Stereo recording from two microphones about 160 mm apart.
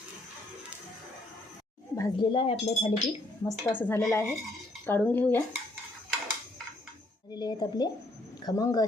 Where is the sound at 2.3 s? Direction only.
30° left (ahead or behind).